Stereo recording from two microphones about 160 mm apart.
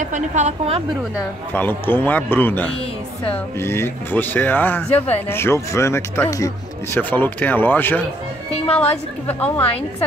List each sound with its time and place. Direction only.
0.0 s a woman's voice: 50° right (ahead or behind)
1.5 s speech: 10° left (ahead or behind)
9.3 s speech: 10° left (ahead or behind)